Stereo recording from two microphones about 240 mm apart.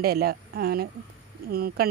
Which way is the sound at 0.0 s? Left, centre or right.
Right.